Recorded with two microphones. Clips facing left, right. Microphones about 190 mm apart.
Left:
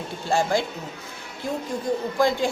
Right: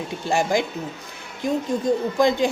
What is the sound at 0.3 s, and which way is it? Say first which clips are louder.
Speech: right 1 dB; 15° right (ahead or behind).